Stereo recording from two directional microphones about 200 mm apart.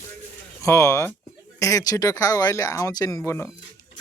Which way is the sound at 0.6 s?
15° left (ahead or behind).